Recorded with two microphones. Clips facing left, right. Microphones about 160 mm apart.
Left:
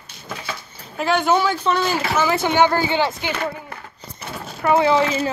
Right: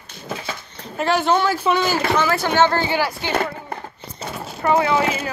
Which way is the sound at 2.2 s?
15° left (ahead or behind).